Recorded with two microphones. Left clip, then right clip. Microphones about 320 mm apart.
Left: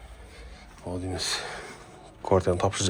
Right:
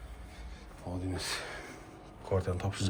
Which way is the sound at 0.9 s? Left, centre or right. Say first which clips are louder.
Left 7 dB; centre.